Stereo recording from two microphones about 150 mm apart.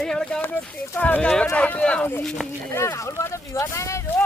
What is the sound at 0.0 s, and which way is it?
Speech, 5° left (ahead or behind).